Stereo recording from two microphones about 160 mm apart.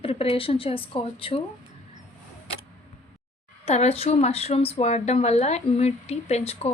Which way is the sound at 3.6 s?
40° left (ahead or behind).